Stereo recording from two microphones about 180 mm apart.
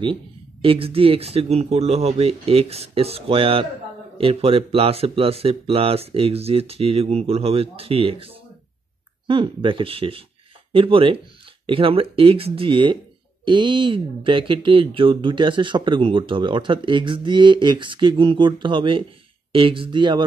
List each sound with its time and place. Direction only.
0.0 s speech: 30° right (ahead or behind)